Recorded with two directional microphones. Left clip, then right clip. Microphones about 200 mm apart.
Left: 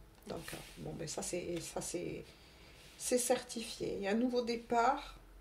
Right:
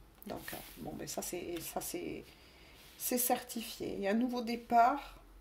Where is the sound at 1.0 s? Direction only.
40° right (ahead or behind).